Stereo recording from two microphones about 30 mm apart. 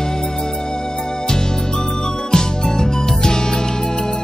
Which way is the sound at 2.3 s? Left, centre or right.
Centre.